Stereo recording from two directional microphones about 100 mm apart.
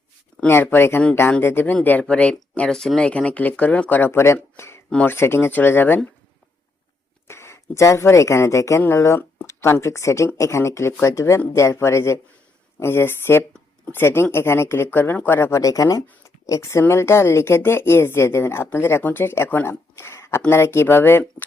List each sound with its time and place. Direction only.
0.4 s speech: 20° left (ahead or behind)
4.5 s a sound: 25° left (ahead or behind)
4.9 s speech: 20° left (ahead or behind)
7.3 s speech: 25° left (ahead or behind)
16.2 s a sound: 30° left (ahead or behind)
16.8 s speech: 25° left (ahead or behind)